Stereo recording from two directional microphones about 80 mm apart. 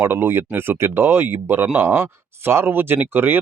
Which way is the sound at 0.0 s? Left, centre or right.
Right.